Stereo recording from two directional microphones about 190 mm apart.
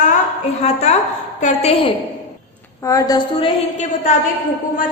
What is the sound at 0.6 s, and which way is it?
A woman's voice, 35° left (ahead or behind).